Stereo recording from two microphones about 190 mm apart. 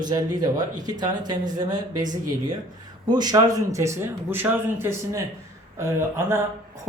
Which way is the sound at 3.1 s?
20° right (ahead or behind).